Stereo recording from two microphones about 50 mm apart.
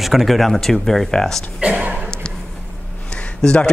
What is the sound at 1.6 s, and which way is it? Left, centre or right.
Speech, right.